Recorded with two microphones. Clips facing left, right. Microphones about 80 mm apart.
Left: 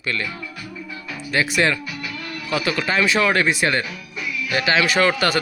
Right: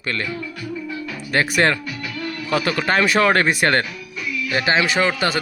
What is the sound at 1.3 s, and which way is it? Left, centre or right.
Speech, right.